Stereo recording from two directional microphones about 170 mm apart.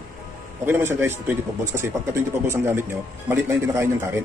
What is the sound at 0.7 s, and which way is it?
Speech, 10° right (ahead or behind).